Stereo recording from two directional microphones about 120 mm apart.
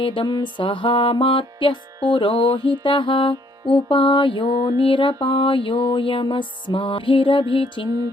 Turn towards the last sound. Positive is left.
turn(degrees=45)  # may be behind; listen again after turning